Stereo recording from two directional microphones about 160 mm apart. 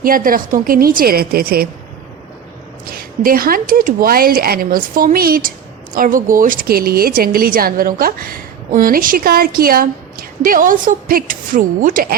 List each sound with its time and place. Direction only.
0.0 s a woman's voice: 60° right (ahead or behind)
2.8 s a woman's voice: 65° right (ahead or behind)